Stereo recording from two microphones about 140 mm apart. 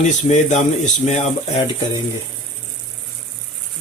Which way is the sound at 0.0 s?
55° left (ahead or behind).